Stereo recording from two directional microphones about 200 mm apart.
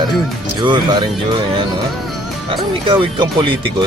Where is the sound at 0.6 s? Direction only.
25° right (ahead or behind).